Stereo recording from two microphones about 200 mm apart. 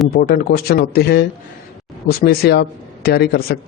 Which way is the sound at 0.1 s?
50° left (ahead or behind).